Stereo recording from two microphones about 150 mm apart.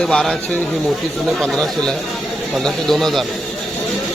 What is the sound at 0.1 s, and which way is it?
Speech, 5° left (ahead or behind).